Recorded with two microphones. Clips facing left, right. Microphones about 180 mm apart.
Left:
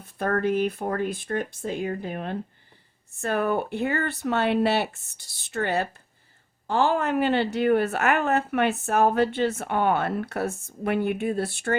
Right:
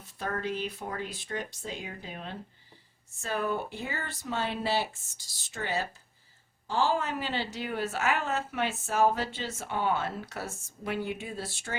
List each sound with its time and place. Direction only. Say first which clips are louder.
0.0 s a woman's voice: left 9 dB; 55° left (ahead or behind)